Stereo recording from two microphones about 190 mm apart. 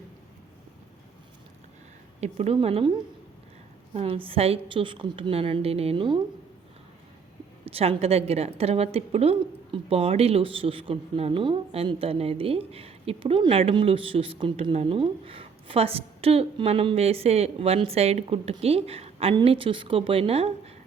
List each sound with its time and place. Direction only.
2.2 s a woman's voice: 35° right (ahead or behind)
3.9 s a woman's voice: 30° right (ahead or behind)
7.6 s a woman's voice: 30° right (ahead or behind)